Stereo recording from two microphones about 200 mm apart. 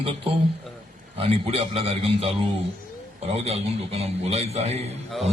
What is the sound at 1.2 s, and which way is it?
Speech, 30° right (ahead or behind).